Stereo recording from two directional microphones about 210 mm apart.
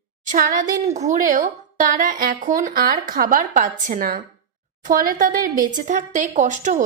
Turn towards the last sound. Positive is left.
turn(degrees=-35)  # may be behind; listen again after turning